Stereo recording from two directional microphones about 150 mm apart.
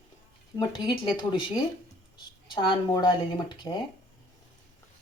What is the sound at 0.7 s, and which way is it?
A woman's voice, 30° left (ahead or behind).